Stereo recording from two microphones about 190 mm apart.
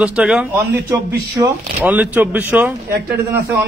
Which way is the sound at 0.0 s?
5° right (ahead or behind).